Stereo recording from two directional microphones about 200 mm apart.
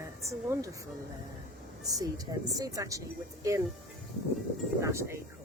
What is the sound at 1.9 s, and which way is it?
A woman's voice, 15° right (ahead or behind).